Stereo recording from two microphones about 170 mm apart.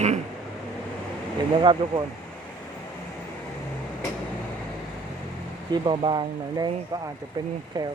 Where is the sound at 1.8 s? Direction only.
25° right (ahead or behind).